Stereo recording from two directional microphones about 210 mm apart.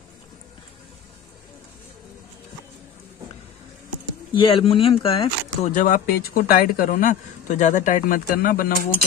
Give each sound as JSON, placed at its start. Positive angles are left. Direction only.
{"t": 4.3, "sound": "speech", "side_deg": 25}